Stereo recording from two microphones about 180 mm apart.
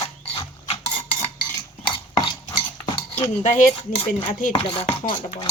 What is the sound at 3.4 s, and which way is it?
Cutlery, 45° left (ahead or behind).